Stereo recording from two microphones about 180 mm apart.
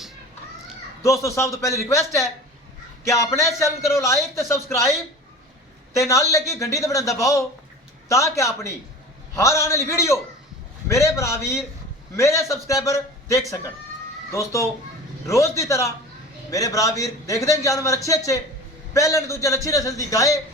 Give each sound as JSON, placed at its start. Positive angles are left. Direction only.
{"t": 1.0, "sound": "a man's voice", "side_deg": 15}
{"t": 6.0, "sound": "a man's voice", "side_deg": 15}